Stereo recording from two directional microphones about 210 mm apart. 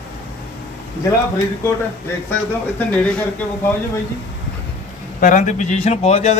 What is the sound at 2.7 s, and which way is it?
Speech, 5° left (ahead or behind).